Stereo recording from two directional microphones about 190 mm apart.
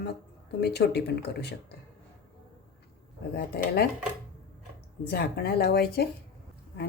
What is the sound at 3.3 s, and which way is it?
Speech, 55° left (ahead or behind).